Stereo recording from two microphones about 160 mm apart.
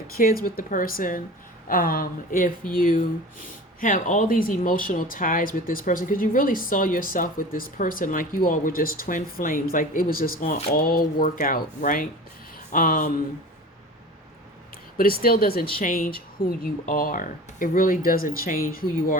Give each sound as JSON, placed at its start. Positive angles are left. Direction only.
{"t": 0.2, "sound": "speech", "side_deg": 65}
{"t": 14.9, "sound": "speech", "side_deg": 65}